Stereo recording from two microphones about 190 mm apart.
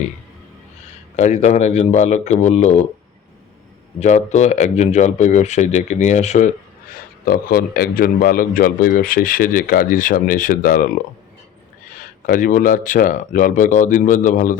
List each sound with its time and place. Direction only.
1.1 s speech: 35° left (ahead or behind)
4.0 s speech: 40° left (ahead or behind)
7.3 s a man's voice: 50° left (ahead or behind)
11.9 s a man's voice: 45° left (ahead or behind)